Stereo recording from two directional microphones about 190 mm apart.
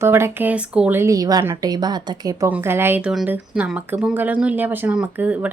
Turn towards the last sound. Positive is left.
turn(degrees=-10)  # may be behind; listen again after turning